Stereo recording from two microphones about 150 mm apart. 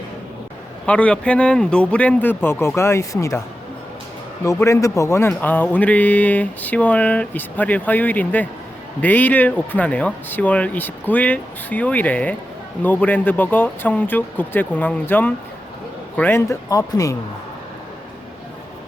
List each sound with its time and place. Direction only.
0.9 s speech: 10° left (ahead or behind)
4.4 s speech: 20° left (ahead or behind)